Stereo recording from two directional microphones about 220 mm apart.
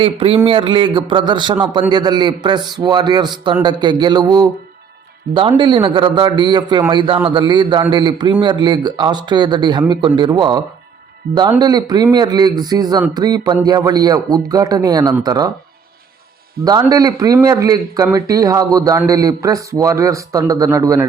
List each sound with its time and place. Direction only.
0.0 s a man's voice: 25° right (ahead or behind)
16.6 s speech: 15° right (ahead or behind)